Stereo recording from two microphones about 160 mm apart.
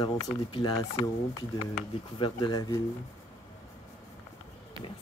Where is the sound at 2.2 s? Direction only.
25° left (ahead or behind).